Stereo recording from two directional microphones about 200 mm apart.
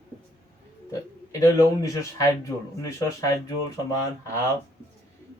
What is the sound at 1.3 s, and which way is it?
Speech, 15° left (ahead or behind).